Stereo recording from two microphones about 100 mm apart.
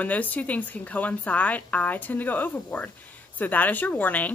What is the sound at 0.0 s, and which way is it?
A woman's voice, 15° left (ahead or behind).